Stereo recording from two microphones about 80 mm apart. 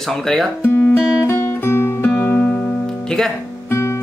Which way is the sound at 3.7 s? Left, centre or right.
Left.